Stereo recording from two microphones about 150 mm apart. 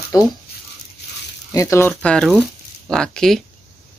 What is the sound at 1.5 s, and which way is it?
Speech, 20° left (ahead or behind).